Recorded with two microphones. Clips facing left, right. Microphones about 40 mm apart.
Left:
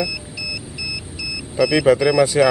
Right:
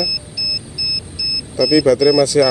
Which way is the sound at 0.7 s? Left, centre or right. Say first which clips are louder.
Right 3 dB; left.